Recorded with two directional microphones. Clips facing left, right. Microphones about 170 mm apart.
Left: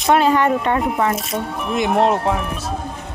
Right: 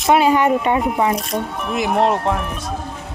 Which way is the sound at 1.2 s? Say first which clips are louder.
Right 1 dB; centre (ahead or behind).